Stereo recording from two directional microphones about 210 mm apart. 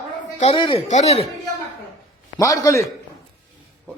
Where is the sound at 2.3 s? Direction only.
15° left (ahead or behind).